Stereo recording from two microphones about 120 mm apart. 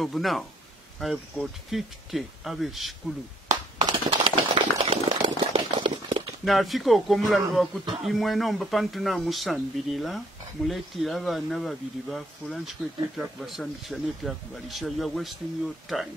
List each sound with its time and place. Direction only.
0.0 s speech: centre (ahead or behind)
3.4 s a sound: 35° right (ahead or behind); by 5.9 s 60° right (ahead or behind)
6.4 s speech: centre (ahead or behind)